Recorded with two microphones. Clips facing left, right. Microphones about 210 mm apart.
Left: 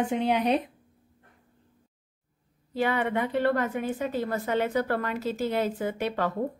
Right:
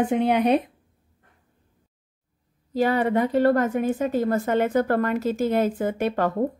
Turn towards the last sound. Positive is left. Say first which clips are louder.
# right 5 dB
turn(degrees=-50)  # may be behind; listen again after turning